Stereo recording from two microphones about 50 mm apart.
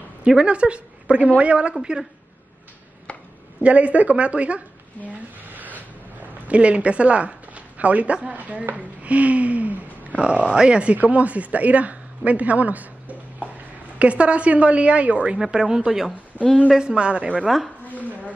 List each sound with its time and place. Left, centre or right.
0.4 s a woman's voice: right
1.8 s speech: centre
3.1 s chopping: left
3.6 s a woman's voice: right
5.4 s a sound: right
6.2 s a woman's voice: right
15.3 s speech: centre
16.3 s a woman's voice: right
16.8 s a woman's voice: centre